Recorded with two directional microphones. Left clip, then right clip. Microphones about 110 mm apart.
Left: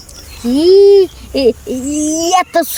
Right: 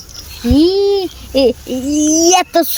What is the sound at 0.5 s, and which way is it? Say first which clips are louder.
A child's voice: left 6 dB; 60° left (ahead or behind).